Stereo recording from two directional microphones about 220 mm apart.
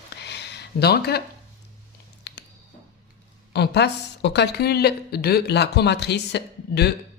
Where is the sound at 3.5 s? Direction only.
50° left (ahead or behind).